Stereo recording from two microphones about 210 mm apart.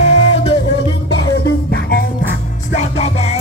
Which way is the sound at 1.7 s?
45° left (ahead or behind).